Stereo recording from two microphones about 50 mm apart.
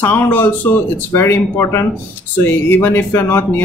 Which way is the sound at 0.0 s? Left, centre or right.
Left.